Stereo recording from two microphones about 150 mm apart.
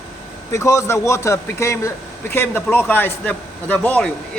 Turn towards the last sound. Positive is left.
turn(degrees=10)  # may be behind; listen again after turning